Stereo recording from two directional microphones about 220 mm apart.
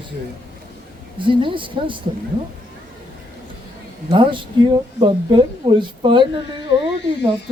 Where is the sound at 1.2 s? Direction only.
20° right (ahead or behind).